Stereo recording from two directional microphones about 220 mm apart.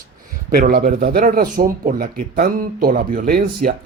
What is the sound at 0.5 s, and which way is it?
Speech, 45° right (ahead or behind).